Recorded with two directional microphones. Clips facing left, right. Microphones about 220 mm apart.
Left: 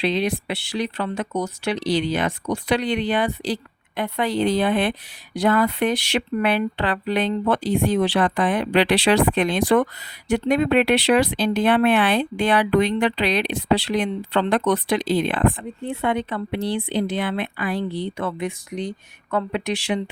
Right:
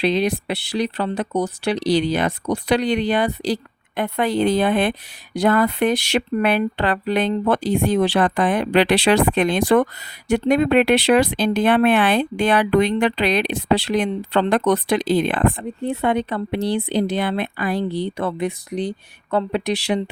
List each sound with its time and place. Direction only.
0.0 s speech: 40° right (ahead or behind)